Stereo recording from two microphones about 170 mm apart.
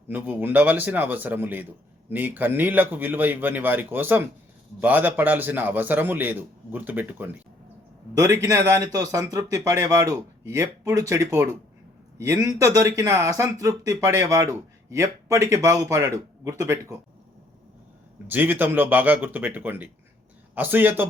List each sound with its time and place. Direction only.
0.1 s a man's voice: 10° right (ahead or behind)
18.3 s a man's voice: 10° right (ahead or behind)